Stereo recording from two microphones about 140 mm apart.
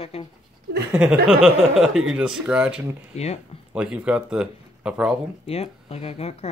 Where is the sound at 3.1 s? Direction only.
50° left (ahead or behind).